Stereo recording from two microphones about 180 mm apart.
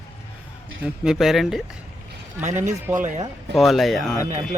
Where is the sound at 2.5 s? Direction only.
40° right (ahead or behind).